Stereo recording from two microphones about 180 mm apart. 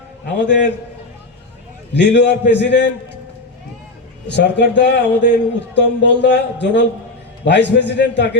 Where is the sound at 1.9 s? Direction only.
75° left (ahead or behind).